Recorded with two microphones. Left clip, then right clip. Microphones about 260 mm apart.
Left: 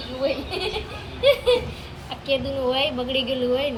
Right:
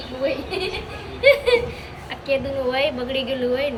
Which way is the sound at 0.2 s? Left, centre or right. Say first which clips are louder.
Right 1 dB; centre.